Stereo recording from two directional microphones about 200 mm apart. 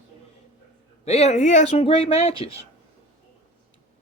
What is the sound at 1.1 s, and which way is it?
Speech, 30° left (ahead or behind).